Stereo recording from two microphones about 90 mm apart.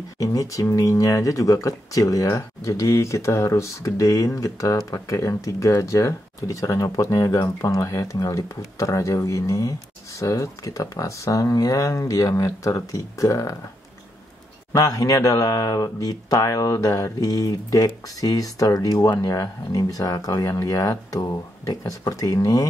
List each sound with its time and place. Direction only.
0.2 s speech: 40° left (ahead or behind)
14.7 s speech: 40° left (ahead or behind)